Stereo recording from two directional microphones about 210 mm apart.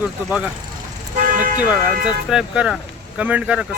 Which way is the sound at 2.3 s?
5° right (ahead or behind).